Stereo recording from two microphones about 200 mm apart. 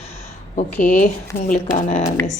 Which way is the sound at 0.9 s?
40° left (ahead or behind).